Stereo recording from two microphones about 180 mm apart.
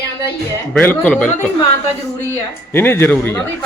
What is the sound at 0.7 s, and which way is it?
Speech, 10° left (ahead or behind).